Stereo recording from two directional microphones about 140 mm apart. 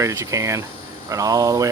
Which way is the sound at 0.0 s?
20° right (ahead or behind).